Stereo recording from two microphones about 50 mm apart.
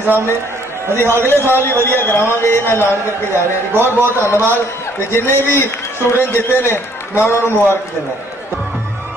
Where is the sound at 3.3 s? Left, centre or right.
Right.